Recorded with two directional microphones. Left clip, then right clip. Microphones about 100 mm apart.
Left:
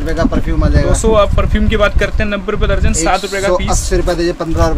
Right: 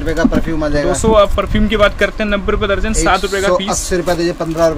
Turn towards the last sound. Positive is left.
turn(degrees=30)  # may be behind; listen again after turning